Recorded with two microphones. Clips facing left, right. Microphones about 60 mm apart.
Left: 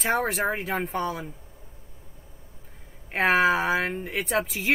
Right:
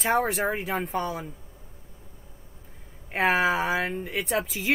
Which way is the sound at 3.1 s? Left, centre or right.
Centre.